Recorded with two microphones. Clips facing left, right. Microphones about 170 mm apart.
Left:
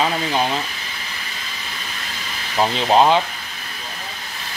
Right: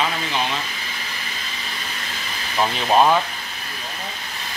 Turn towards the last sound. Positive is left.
turn(degrees=20)  # may be behind; listen again after turning